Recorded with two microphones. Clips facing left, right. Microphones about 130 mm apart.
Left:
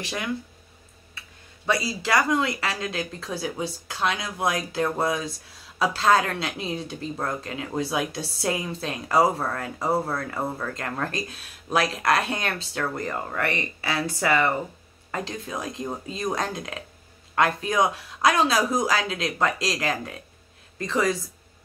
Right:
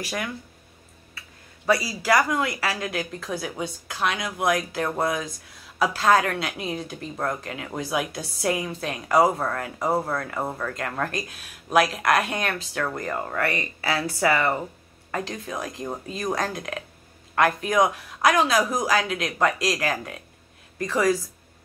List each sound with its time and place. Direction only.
0.0 s speech: 25° left (ahead or behind)
1.7 s a woman's voice: 25° left (ahead or behind)